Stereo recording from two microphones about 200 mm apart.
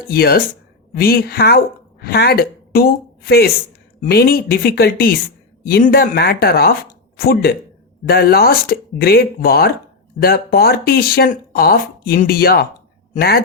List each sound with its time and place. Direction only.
0.1 s a woman's voice: 50° left (ahead or behind)